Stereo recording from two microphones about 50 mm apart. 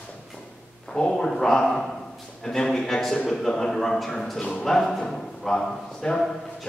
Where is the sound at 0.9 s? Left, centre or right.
Centre.